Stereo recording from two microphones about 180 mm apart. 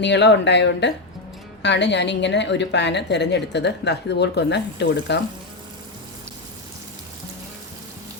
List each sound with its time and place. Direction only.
0.0 s a woman's voice: 75° left (ahead or behind)